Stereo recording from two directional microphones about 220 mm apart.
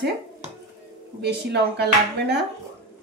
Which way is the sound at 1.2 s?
50° right (ahead or behind).